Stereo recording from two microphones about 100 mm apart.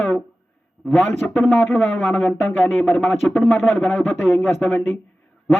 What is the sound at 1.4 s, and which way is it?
Speech, 20° left (ahead or behind).